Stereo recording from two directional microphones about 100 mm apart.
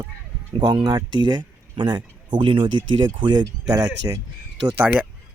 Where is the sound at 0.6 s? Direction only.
45° right (ahead or behind).